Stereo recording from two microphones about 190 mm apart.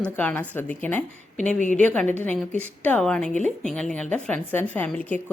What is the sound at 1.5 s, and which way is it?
Speech, 40° left (ahead or behind).